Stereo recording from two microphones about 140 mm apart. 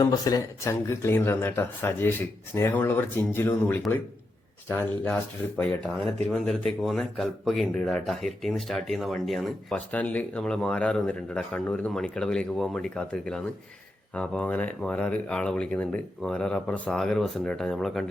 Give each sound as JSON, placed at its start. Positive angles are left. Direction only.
{"t": 0.0, "sound": "speech", "side_deg": 25}
{"t": 4.8, "sound": "speech", "side_deg": 10}